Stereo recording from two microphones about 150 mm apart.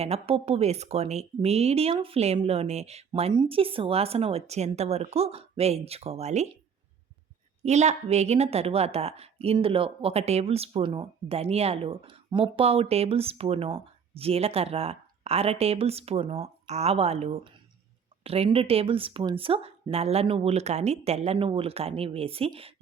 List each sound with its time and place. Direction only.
0.0 s speech: 40° right (ahead or behind)
7.6 s a woman's voice: 50° right (ahead or behind)